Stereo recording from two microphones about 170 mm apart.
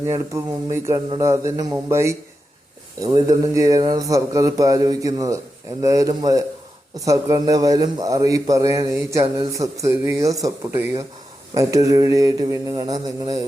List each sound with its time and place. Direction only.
0.0 s speech: 15° right (ahead or behind)